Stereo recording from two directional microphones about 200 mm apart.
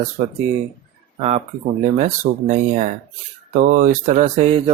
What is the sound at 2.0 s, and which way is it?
Speech, 40° right (ahead or behind).